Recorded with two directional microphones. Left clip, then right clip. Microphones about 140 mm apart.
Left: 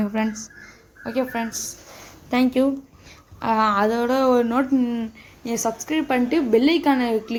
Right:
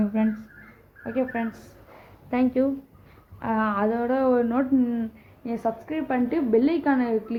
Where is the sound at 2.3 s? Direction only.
30° left (ahead or behind).